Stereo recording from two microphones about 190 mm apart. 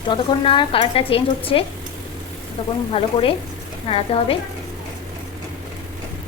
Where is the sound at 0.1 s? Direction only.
25° left (ahead or behind).